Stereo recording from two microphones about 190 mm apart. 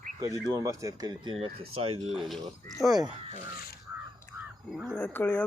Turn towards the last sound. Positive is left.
turn(degrees=10)  # may be behind; listen again after turning